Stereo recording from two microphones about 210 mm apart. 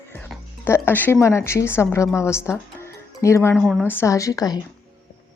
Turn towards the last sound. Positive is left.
turn(degrees=15)  # may be behind; listen again after turning